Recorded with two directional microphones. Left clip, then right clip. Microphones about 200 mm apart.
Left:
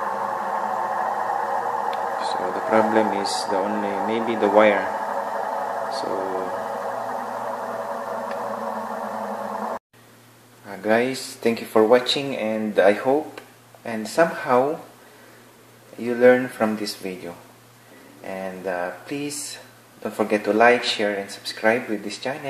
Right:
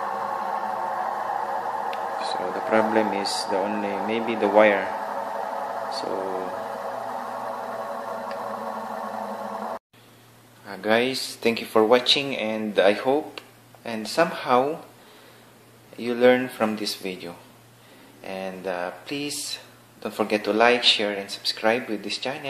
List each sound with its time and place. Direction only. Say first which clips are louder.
0.0 s a sound: left 2 dB; centre (ahead or behind)
10.7 s speech: left 1 dB; centre (ahead or behind)
16.0 s speech: left 3 dB; 5° right (ahead or behind)